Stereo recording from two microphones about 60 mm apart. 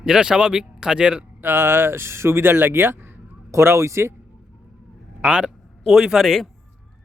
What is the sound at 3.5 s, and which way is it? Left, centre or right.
Speech, right.